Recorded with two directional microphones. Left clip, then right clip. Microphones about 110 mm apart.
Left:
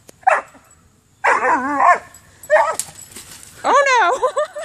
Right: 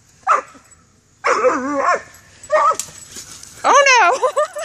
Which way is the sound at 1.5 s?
10° left (ahead or behind).